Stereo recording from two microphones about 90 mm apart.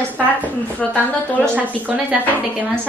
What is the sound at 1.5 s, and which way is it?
Speech, 15° right (ahead or behind).